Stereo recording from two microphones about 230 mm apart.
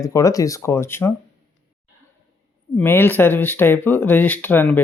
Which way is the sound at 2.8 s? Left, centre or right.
Centre.